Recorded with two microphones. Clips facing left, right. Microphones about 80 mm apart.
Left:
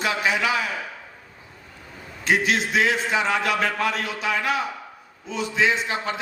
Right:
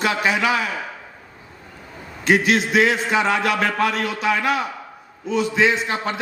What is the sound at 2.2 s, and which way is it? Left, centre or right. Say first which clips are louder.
A man's voice: right 4 dB; right.